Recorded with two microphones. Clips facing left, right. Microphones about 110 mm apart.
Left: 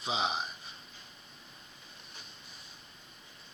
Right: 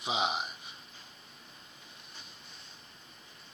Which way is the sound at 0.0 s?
20° right (ahead or behind).